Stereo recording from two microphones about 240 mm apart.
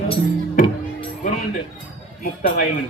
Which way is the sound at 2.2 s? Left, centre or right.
Left.